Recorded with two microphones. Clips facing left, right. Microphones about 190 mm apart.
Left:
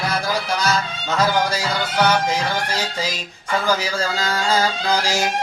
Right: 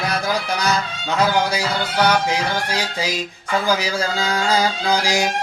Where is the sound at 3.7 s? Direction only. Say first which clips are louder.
Even; 10° right (ahead or behind).